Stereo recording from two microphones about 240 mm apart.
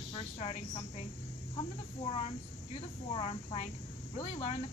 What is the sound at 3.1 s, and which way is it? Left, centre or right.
Speech, left.